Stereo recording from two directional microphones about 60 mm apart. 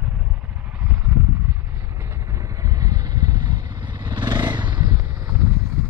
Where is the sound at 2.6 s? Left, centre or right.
Right.